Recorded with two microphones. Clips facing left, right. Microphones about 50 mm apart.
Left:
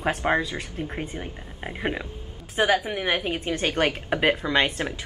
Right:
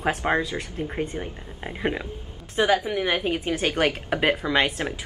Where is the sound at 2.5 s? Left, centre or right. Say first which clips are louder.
Right 1 dB; left.